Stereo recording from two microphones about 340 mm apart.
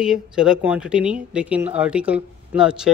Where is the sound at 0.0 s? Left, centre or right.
Centre.